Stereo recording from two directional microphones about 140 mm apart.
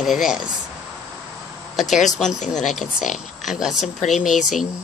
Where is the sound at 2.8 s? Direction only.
65° left (ahead or behind).